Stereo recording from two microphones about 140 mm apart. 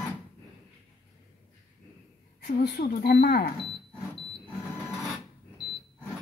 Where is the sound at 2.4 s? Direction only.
85° left.